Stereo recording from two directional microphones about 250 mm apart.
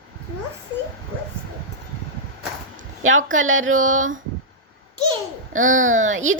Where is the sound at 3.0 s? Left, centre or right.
Right.